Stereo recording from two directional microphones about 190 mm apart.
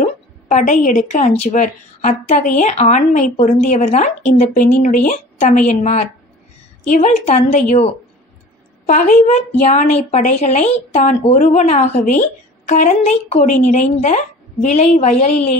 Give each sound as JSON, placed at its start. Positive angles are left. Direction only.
{"t": 0.0, "sound": "a woman's voice", "side_deg": 40}